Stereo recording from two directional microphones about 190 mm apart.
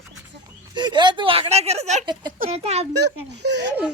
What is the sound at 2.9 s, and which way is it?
Speech, 60° right (ahead or behind).